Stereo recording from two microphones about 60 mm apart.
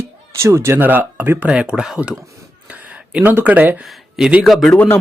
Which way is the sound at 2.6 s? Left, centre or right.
Centre.